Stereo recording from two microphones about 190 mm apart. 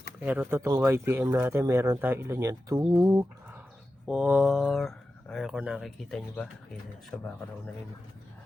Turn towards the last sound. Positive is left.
turn(degrees=5)  # may be behind; listen again after turning